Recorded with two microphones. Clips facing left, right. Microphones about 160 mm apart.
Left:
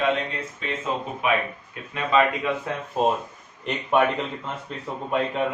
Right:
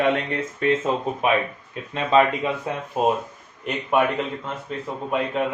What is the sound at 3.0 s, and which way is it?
A man's voice, 10° right (ahead or behind).